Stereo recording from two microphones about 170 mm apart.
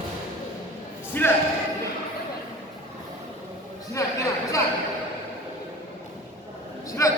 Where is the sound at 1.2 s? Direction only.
10° left (ahead or behind).